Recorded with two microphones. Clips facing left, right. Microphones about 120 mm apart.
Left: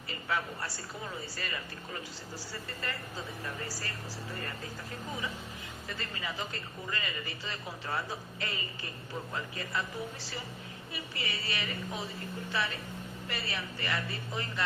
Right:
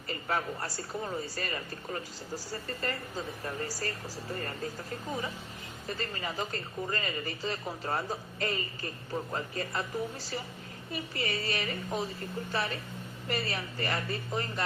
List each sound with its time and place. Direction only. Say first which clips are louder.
0.1 s speech: right 2 dB; 40° right (ahead or behind)
5.9 s speech: right 4 dB; 40° right (ahead or behind)
10.9 s a woman's voice: right 6 dB; 45° right (ahead or behind)